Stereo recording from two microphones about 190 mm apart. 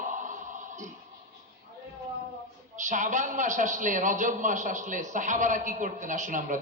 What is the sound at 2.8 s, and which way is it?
A man's voice, 40° right (ahead or behind).